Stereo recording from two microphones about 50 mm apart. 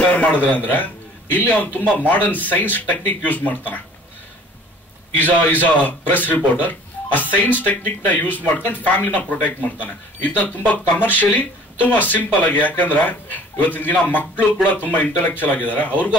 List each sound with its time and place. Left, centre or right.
0.0 s a man's voice: left
5.1 s speech: left